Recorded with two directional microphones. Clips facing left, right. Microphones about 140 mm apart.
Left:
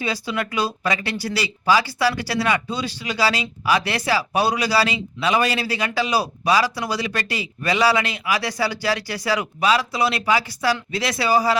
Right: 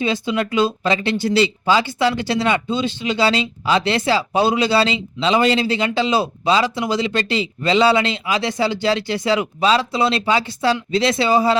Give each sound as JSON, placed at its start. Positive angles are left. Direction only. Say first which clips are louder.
{"t": 0.0, "sound": "speech", "louder": "right 5 dB", "side_deg": -20}